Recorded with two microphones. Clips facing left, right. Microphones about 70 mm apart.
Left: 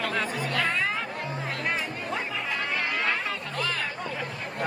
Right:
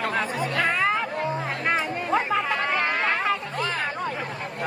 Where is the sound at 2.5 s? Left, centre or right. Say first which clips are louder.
Right 5 dB; right.